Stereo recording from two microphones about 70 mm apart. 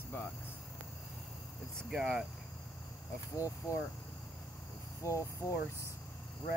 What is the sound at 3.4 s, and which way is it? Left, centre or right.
Speech, left.